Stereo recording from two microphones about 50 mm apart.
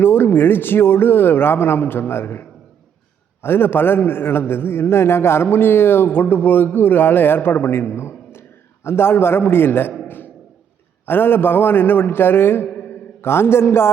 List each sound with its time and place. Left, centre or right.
0.0 s a man's voice: left
11.0 s a man's voice: left